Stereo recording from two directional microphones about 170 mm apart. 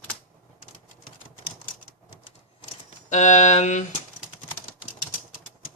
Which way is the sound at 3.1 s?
45° left (ahead or behind).